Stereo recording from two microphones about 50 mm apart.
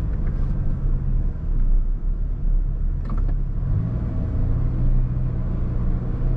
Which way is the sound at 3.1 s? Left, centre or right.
Centre.